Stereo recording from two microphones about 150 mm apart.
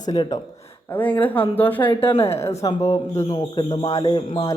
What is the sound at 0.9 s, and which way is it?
Speech, 10° left (ahead or behind).